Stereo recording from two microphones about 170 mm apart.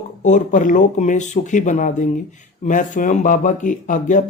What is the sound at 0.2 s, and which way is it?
Speech, 45° left (ahead or behind).